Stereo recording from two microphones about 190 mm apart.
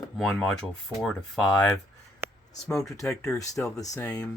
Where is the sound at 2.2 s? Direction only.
15° right (ahead or behind).